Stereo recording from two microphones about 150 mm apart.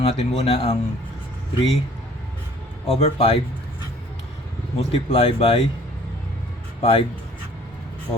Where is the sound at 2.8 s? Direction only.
40° left (ahead or behind).